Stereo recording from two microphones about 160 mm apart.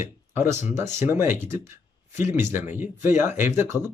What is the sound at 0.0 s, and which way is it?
Speech, 15° right (ahead or behind).